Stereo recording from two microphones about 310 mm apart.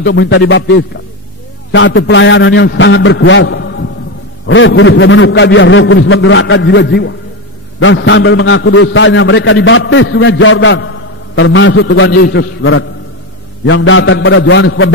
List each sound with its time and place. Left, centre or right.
0.0 s a man's voice: left